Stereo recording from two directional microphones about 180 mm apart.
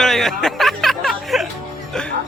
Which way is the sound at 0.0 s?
Centre (ahead or behind).